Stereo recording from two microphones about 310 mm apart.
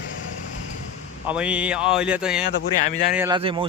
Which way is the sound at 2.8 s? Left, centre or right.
Left.